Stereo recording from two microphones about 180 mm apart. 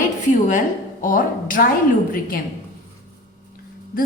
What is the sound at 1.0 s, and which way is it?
Speech, 50° left (ahead or behind).